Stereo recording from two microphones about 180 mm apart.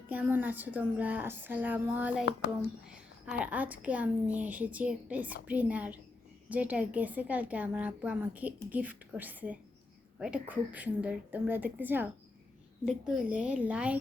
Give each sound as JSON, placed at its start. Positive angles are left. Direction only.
{"t": 0.1, "sound": "a woman's voice", "side_deg": -10}